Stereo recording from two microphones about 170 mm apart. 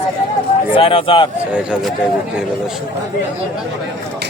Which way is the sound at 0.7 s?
30° left (ahead or behind).